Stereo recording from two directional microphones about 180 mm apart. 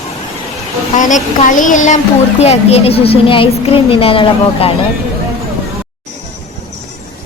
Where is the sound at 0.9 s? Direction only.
45° left (ahead or behind).